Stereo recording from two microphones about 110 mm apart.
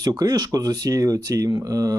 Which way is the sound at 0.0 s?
35° right (ahead or behind).